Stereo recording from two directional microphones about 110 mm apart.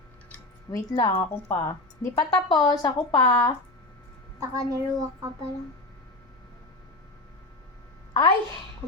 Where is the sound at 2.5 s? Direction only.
40° left (ahead or behind).